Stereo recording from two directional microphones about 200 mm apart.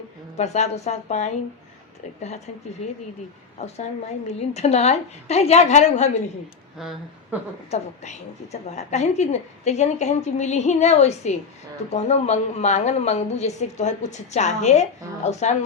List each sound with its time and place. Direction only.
0.3 s a woman's voice: 35° left (ahead or behind)
2.8 s a woman's voice: 35° left (ahead or behind)
6.7 s speech: centre (ahead or behind)
7.7 s a woman's voice: 35° left (ahead or behind)